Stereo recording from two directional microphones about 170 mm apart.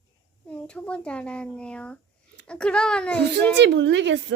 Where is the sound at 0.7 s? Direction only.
5° left (ahead or behind).